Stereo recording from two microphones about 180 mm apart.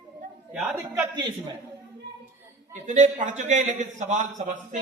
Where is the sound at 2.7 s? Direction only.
45° right (ahead or behind).